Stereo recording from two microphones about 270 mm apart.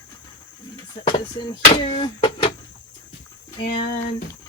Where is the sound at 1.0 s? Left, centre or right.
Centre.